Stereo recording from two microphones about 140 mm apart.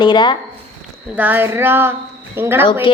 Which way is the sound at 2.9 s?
35° left (ahead or behind).